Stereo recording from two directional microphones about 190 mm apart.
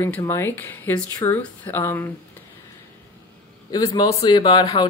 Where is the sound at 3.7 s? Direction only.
20° left (ahead or behind).